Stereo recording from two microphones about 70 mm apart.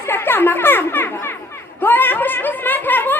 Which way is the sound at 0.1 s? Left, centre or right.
Left.